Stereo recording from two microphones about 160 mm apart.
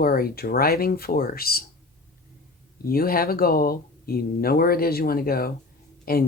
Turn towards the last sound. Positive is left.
turn(degrees=70)  # may be behind; listen again after turning